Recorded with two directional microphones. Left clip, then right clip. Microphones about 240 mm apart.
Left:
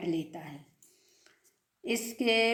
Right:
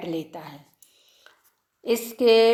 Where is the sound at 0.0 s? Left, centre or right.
Right.